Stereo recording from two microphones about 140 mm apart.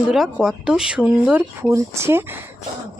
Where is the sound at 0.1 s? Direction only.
5° right (ahead or behind).